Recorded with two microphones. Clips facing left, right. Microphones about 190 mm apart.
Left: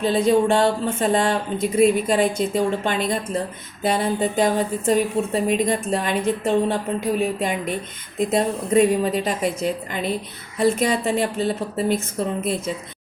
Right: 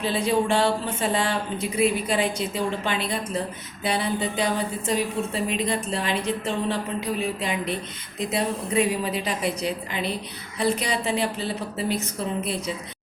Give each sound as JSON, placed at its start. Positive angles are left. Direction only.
{"t": 0.0, "sound": "speech", "side_deg": 45}